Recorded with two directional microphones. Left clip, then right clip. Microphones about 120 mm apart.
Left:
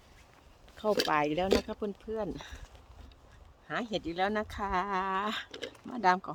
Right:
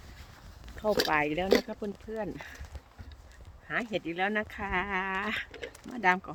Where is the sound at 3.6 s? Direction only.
40° left (ahead or behind).